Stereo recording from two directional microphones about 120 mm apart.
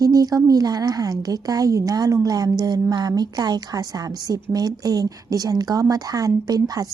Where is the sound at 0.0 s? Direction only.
30° right (ahead or behind).